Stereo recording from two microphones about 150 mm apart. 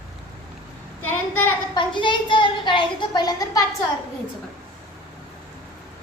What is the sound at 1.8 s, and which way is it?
A woman's voice, 30° left (ahead or behind).